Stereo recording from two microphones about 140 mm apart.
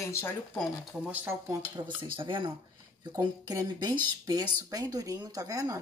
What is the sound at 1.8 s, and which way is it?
Speech, 30° right (ahead or behind).